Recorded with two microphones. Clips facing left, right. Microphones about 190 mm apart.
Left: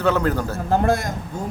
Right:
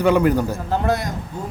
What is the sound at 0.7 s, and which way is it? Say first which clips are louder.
Speech: left 2 dB; 45° left (ahead or behind).